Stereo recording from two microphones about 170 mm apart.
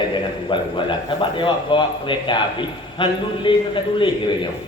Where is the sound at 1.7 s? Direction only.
30° left (ahead or behind).